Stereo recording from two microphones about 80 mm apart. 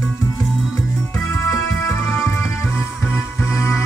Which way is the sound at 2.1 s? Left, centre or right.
Left.